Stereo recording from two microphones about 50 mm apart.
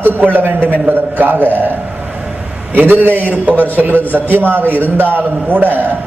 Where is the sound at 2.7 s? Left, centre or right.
Right.